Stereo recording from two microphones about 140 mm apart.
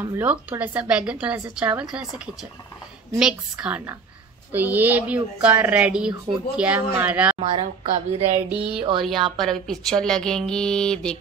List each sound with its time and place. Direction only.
0.1 s a woman's voice: 10° right (ahead or behind)
7.3 s a woman's voice: 45° right (ahead or behind)
8.5 s a woman's voice: 5° right (ahead or behind)